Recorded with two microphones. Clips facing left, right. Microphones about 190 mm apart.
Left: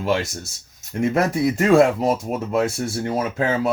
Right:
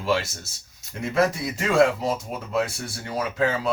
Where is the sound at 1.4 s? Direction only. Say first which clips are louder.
Left 9 dB; 50° left (ahead or behind).